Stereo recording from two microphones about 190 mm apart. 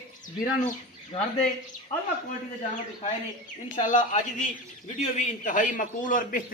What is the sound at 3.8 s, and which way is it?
A man's voice, 40° left (ahead or behind).